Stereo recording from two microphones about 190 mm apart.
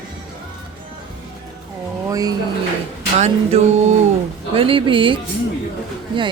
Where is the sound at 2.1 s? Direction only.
20° right (ahead or behind).